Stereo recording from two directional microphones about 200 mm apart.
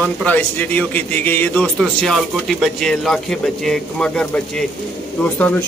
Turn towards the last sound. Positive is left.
turn(degrees=10)  # may be behind; listen again after turning